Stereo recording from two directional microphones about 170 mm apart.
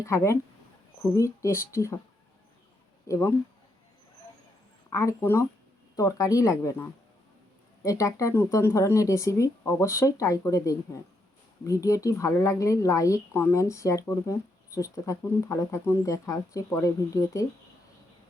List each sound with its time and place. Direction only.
0.0 s speech: 15° left (ahead or behind)
3.1 s speech: 15° left (ahead or behind)
4.9 s speech: 15° left (ahead or behind)